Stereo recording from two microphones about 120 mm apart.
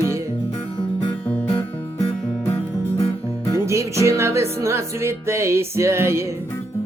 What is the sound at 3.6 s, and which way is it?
Music, 25° right (ahead or behind).